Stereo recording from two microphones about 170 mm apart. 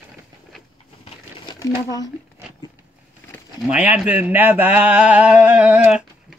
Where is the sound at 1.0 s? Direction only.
25° left (ahead or behind).